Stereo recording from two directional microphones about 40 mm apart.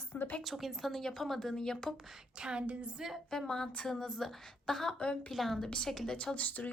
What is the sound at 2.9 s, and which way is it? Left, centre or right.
Speech, centre.